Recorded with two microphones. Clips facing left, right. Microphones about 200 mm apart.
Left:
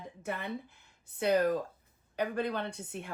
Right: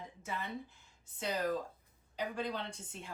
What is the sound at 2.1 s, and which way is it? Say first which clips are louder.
Speech: left 6 dB; 60° left (ahead or behind).